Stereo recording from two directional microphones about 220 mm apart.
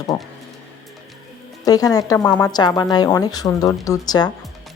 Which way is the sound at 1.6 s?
15° left (ahead or behind).